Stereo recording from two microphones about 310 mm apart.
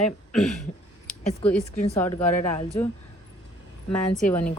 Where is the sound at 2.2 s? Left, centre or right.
Left.